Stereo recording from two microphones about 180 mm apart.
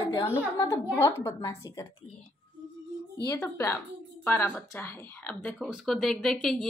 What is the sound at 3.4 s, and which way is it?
Speech, 15° left (ahead or behind).